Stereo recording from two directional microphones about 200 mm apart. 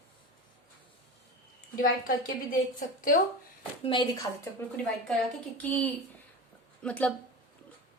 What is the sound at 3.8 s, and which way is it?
Speech, 20° left (ahead or behind).